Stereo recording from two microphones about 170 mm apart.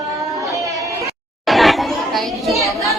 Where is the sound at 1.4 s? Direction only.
Centre (ahead or behind).